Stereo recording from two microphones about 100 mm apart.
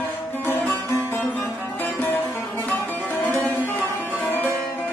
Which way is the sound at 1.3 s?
15° left (ahead or behind).